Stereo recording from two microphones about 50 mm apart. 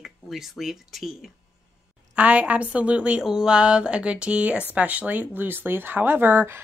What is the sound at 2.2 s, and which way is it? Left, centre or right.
Speech, right.